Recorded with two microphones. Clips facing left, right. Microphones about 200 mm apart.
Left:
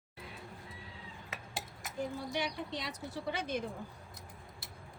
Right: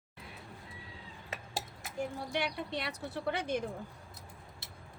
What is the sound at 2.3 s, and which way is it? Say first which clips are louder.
Speech: right 5 dB; 60° right (ahead or behind).